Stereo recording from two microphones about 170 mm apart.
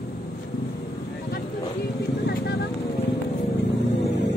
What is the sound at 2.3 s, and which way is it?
Vehicle, 70° left (ahead or behind).